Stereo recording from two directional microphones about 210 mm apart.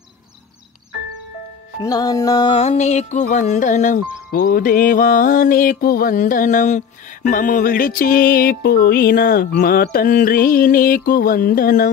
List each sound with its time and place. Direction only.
1.8 s music: 20° left (ahead or behind); by 11.9 s 40° left (ahead or behind)